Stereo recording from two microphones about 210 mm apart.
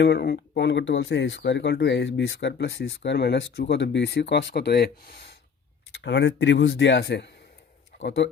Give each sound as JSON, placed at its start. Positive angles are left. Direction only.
{"t": 0.0, "sound": "speech", "side_deg": 55}